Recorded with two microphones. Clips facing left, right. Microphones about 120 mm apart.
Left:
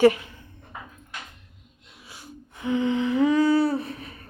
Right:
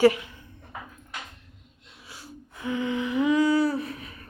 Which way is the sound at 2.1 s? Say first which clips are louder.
Even; 20° left (ahead or behind).